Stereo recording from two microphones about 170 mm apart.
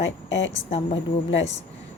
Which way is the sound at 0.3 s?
90° left.